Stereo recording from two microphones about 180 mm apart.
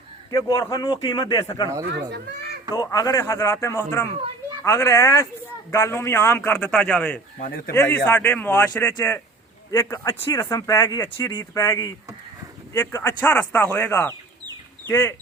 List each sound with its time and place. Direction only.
0.3 s speech: 20° left (ahead or behind)
1.9 s speech: 70° right (ahead or behind)
2.7 s speech: 20° left (ahead or behind)